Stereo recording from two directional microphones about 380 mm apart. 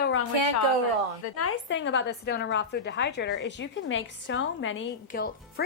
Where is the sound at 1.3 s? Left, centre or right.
Left.